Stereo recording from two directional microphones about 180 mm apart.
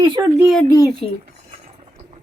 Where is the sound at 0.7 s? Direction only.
20° left (ahead or behind).